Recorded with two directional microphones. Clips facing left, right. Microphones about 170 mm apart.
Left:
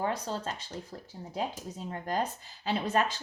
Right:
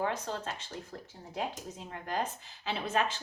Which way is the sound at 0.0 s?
35° left (ahead or behind).